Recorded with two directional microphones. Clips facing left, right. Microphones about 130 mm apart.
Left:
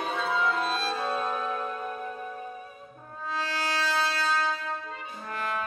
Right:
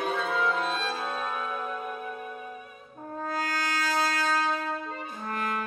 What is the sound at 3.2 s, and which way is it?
Music, 45° right (ahead or behind).